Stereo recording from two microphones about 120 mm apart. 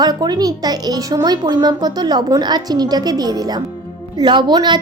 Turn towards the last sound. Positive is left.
turn(degrees=-40)  # may be behind; listen again after turning